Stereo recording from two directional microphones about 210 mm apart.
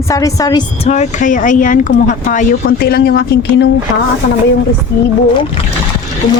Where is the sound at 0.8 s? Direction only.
35° left (ahead or behind); by 3.6 s 50° left (ahead or behind).